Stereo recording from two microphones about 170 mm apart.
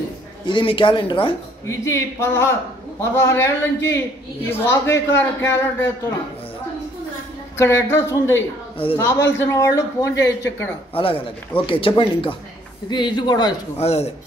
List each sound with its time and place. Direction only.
0.5 s speech: 30° left (ahead or behind)
1.7 s a man's voice: 15° left (ahead or behind)
7.5 s a man's voice: 15° left (ahead or behind)
11.0 s speech: 30° left (ahead or behind)
13.7 s speech: 35° left (ahead or behind)